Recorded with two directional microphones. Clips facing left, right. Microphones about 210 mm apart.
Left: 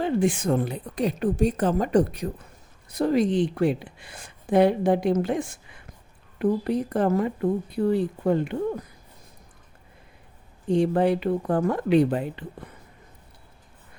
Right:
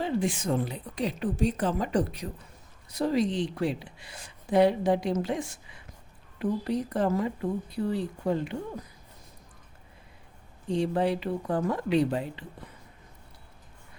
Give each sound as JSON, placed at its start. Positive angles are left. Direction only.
{"t": 0.0, "sound": "speech", "side_deg": 55}
{"t": 10.7, "sound": "speech", "side_deg": 55}